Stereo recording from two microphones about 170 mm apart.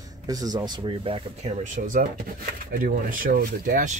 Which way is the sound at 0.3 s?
20° right (ahead or behind).